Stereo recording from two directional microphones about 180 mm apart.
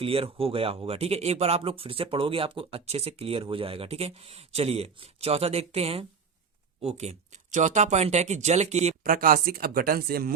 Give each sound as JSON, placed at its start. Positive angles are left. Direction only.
{"t": 0.0, "sound": "speech", "side_deg": -30}